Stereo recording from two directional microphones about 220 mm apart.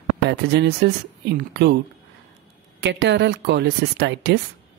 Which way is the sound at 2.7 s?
55° right (ahead or behind).